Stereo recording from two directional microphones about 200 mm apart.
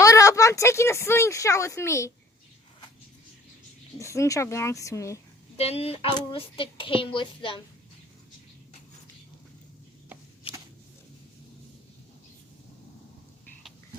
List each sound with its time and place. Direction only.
0.0 s speech: 15° left (ahead or behind)
3.9 s a woman's voice: 15° left (ahead or behind)
5.5 s a woman's voice: 30° left (ahead or behind)
10.5 s a sound: 25° left (ahead or behind)